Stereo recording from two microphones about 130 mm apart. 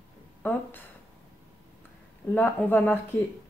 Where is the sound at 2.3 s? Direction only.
15° left (ahead or behind).